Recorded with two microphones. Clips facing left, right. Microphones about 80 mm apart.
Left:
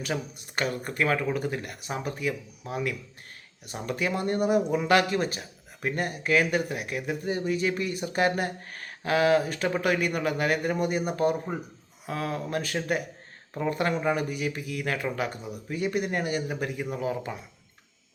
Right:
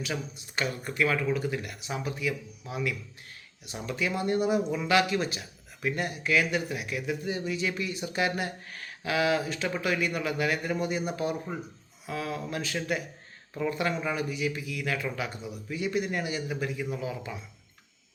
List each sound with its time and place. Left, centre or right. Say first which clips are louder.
0.0 s speech: left 3 dB; left